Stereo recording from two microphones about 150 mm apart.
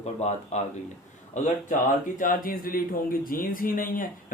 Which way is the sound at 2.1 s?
65° left (ahead or behind).